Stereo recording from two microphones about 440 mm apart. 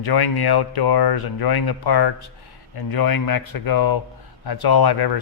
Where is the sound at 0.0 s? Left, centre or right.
Left.